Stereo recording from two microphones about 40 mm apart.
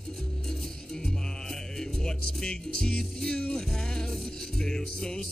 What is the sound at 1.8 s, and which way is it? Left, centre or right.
Music, centre.